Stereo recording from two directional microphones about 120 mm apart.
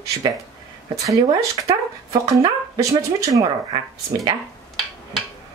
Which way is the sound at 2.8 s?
30° right (ahead or behind).